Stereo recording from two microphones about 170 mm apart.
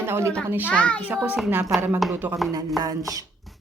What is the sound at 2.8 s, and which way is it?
Speech, 20° right (ahead or behind).